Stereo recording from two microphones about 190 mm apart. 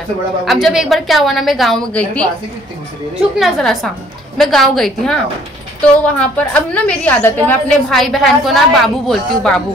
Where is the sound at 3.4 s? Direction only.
Centre (ahead or behind).